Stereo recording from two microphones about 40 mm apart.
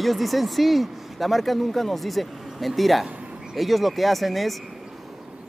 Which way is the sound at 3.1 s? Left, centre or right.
Right.